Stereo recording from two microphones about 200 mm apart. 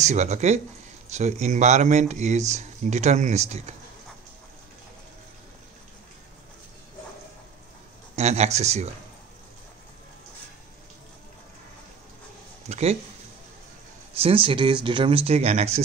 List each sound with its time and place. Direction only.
0.0 s speech: 35° right (ahead or behind)
8.2 s speech: 35° right (ahead or behind)
12.6 s speech: 35° right (ahead or behind)
14.1 s speech: 30° right (ahead or behind)